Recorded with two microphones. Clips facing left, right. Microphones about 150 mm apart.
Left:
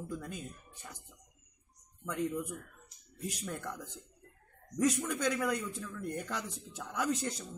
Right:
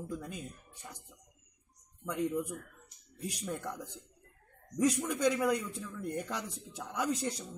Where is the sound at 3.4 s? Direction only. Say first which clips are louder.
Right 2 dB; 10° right (ahead or behind).